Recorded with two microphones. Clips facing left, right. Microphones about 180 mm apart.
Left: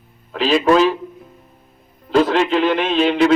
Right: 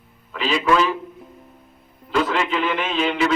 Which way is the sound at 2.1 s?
35° left (ahead or behind).